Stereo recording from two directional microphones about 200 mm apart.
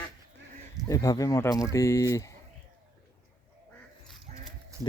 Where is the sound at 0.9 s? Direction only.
15° left (ahead or behind).